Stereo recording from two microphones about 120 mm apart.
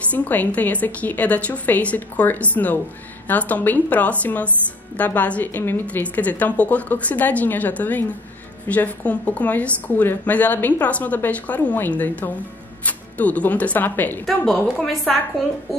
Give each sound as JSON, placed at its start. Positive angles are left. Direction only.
{"t": 0.1, "sound": "a woman's voice", "side_deg": 15}
{"t": 14.2, "sound": "a woman's voice", "side_deg": 5}